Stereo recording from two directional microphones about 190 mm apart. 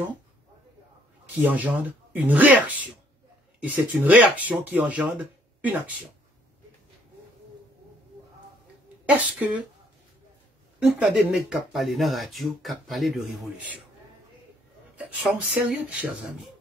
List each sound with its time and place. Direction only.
1.4 s speech: 10° right (ahead or behind)
9.0 s speech: 10° right (ahead or behind)
10.8 s speech: 5° right (ahead or behind)
15.0 s speech: 5° right (ahead or behind)